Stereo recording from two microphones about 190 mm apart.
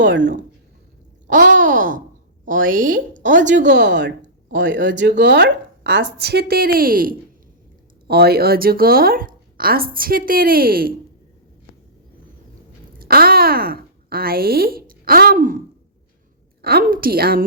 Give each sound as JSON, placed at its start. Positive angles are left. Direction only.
{"t": 1.3, "sound": "a woman's voice", "side_deg": -45}
{"t": 3.7, "sound": "a woman's voice", "side_deg": -65}
{"t": 6.1, "sound": "a woman's voice", "side_deg": -60}
{"t": 13.0, "sound": "a woman's voice", "side_deg": -55}